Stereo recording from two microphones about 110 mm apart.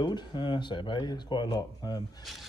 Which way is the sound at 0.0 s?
40° left (ahead or behind).